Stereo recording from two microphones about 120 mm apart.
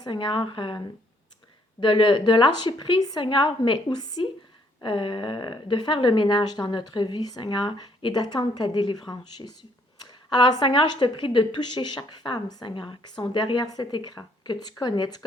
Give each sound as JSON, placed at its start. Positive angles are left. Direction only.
{"t": 0.0, "sound": "speech", "side_deg": 40}
{"t": 1.8, "sound": "speech", "side_deg": 45}